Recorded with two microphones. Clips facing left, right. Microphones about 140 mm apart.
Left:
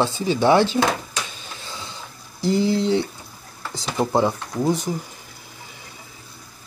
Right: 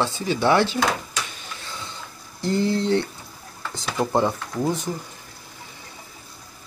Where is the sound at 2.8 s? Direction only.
10° left (ahead or behind).